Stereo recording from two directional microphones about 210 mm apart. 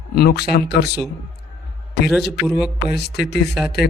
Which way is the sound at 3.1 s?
50° left (ahead or behind).